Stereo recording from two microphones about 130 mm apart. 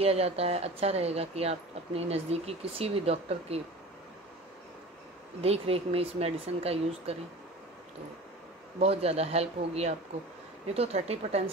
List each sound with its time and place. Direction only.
0.0 s speech: 50° right (ahead or behind)
5.4 s speech: 50° right (ahead or behind)
8.7 s speech: 55° right (ahead or behind)